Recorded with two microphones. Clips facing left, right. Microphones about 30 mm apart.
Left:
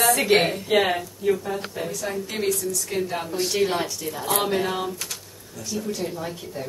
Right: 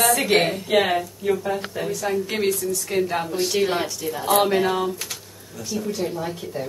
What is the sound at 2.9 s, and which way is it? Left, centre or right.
A woman's voice, centre.